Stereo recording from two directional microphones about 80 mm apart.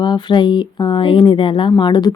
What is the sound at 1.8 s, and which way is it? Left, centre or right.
Speech, left.